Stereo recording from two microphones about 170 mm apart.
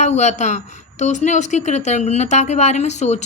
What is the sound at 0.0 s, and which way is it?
A woman's voice, 40° left (ahead or behind).